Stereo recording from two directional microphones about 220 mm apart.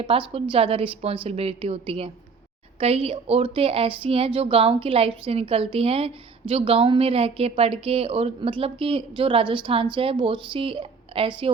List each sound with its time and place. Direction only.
0.0 s a woman's voice: 25° right (ahead or behind)